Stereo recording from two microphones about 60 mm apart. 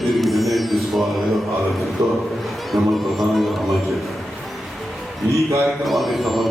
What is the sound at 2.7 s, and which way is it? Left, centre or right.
Speech, centre.